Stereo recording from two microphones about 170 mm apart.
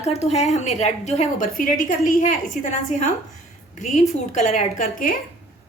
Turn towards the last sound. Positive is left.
turn(degrees=55)  # may be behind; listen again after turning